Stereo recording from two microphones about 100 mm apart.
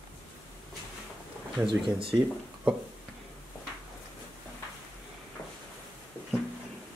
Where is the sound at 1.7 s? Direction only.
60° right (ahead or behind).